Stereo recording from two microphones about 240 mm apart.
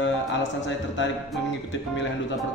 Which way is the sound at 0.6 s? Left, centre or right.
Left.